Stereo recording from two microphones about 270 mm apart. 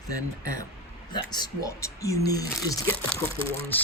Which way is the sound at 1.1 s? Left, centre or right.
Centre.